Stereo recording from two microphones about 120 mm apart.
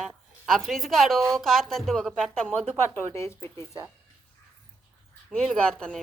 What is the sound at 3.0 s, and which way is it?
Speech, 20° left (ahead or behind).